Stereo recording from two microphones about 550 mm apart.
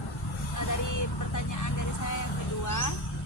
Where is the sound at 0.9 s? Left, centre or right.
Left.